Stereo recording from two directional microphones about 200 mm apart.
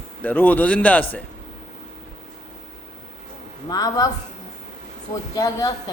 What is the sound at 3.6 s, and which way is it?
Speech, 20° left (ahead or behind).